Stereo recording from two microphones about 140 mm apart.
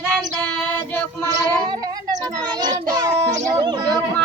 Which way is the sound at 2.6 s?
30° right (ahead or behind).